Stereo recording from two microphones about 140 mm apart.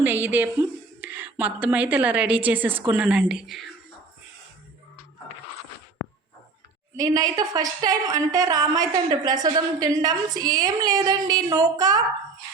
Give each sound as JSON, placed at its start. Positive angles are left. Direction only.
{"t": 0.0, "sound": "a woman's voice", "side_deg": -10}
{"t": 6.9, "sound": "a woman's voice", "side_deg": -25}